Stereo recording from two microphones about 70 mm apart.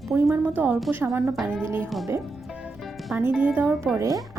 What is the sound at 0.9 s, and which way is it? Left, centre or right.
Speech, right.